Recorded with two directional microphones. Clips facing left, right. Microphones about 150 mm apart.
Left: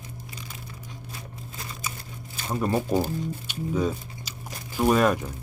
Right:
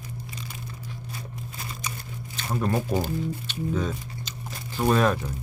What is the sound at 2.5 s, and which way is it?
Speech, 10° left (ahead or behind).